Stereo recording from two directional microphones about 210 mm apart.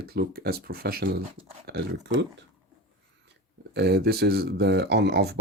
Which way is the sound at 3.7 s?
50° right (ahead or behind).